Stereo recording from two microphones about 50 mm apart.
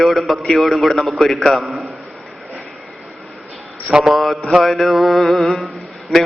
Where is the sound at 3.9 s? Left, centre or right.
Centre.